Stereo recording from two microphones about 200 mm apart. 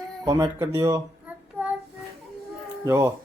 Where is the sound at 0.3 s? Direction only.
20° right (ahead or behind).